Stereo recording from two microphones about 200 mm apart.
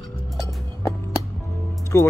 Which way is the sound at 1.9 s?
15° left (ahead or behind).